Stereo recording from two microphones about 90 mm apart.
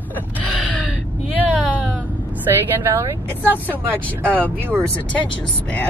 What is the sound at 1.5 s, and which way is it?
Speech, 10° right (ahead or behind).